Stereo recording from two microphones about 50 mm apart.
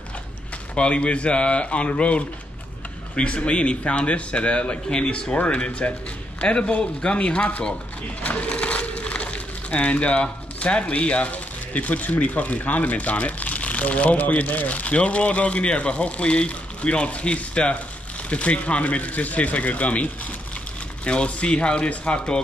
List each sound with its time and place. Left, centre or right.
0.7 s a man's voice: left
8.5 s a man's voice: left